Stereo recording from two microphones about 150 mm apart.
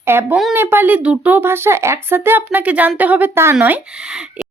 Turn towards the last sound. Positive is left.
turn(degrees=-5)  # may be behind; listen again after turning